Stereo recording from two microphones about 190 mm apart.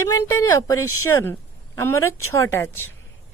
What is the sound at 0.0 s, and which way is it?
Speech, 15° left (ahead or behind).